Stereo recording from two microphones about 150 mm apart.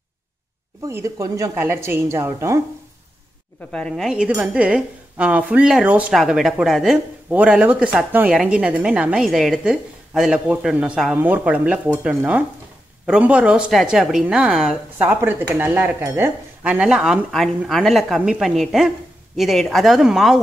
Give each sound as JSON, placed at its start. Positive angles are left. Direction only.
{"t": 0.8, "sound": "a woman's voice", "side_deg": -20}
{"t": 3.7, "sound": "a woman's voice", "side_deg": 5}